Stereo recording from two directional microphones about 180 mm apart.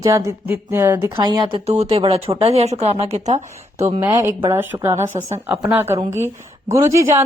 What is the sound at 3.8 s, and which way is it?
Speech, 15° right (ahead or behind).